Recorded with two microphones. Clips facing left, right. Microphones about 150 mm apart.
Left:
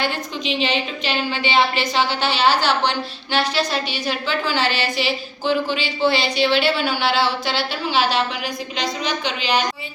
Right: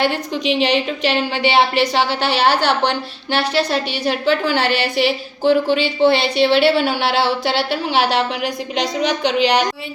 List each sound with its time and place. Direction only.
0.0 s a woman's voice: 70° right (ahead or behind)